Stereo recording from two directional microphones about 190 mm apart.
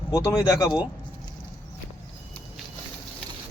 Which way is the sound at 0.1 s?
15° left (ahead or behind).